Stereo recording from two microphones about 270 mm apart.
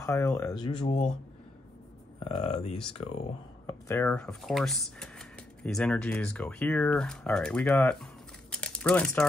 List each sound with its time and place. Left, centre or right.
0.0 s speech: centre
2.2 s speech: left
3.6 s speech: centre